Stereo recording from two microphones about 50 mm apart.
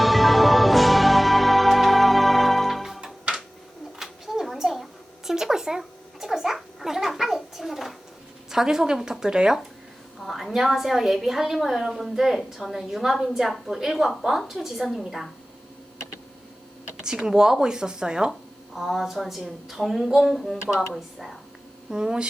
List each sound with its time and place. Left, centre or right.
0.0 s music: centre
3.0 s music: centre
3.9 s a sound: centre
8.4 s speech: centre
10.2 s a woman's voice: centre
17.0 s speech: centre
18.3 s a woman's voice: centre
21.8 s speech: centre